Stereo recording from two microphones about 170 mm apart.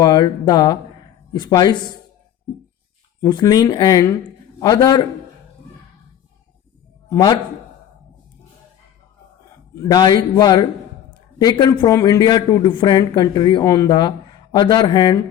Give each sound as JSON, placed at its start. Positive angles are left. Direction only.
{"t": 0.0, "sound": "a man's voice", "side_deg": 25}
{"t": 3.2, "sound": "a man's voice", "side_deg": 25}
{"t": 7.1, "sound": "speech", "side_deg": 20}
{"t": 9.8, "sound": "a man's voice", "side_deg": 25}